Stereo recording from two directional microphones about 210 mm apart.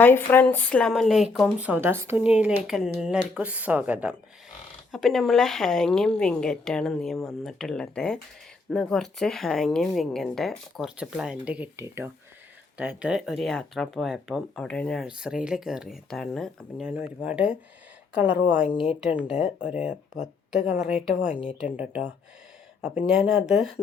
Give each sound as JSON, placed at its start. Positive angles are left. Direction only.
{"t": 0.0, "sound": "a woman's voice", "side_deg": 10}